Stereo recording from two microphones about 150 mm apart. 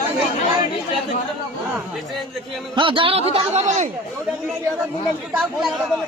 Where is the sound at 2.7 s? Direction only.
35° right (ahead or behind); by 3.9 s 50° right (ahead or behind).